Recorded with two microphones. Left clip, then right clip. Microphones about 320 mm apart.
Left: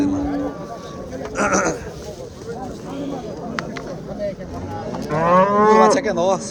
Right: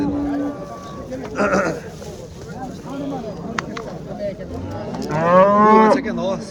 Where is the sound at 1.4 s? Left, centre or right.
Centre.